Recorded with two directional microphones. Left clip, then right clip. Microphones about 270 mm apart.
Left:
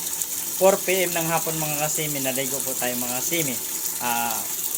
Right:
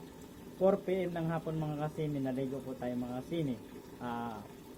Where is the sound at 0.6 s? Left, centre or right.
Centre.